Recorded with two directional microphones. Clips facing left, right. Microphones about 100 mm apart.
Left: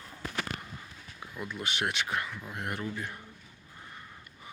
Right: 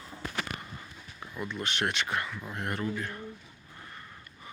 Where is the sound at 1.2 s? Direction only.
5° left (ahead or behind).